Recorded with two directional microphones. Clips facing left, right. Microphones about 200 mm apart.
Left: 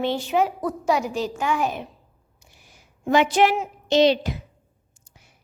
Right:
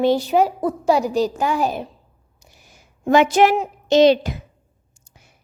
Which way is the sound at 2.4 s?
40° right (ahead or behind).